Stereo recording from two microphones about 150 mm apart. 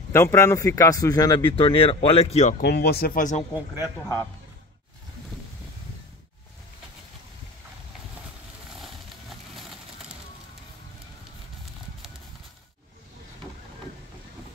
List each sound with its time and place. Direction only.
0.1 s speech: 20° left (ahead or behind); by 2.5 s 45° left (ahead or behind)
2.6 s speech: 90° left
3.8 s speech: 15° left (ahead or behind)
8.8 s horse: centre (ahead or behind)